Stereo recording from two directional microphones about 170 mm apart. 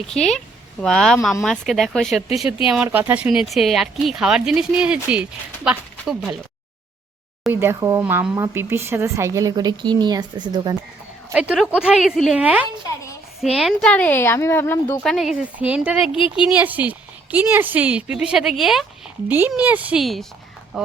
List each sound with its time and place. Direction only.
0.1 s speech: 5° left (ahead or behind)
7.4 s speech: 15° right (ahead or behind)
11.3 s a woman's voice: 5° right (ahead or behind); by 14.9 s 10° left (ahead or behind)
15.0 s speech: centre (ahead or behind)